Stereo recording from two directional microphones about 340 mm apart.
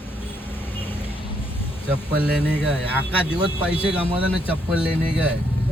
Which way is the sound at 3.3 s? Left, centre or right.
Centre.